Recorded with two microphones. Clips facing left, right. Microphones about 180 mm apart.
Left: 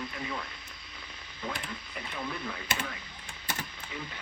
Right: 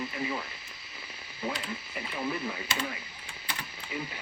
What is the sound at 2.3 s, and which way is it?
Speech, 10° right (ahead or behind).